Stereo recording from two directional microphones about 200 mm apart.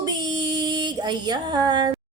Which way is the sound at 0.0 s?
20° right (ahead or behind).